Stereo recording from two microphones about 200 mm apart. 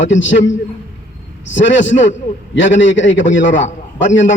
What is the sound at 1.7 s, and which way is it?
A man's voice, 65° left (ahead or behind).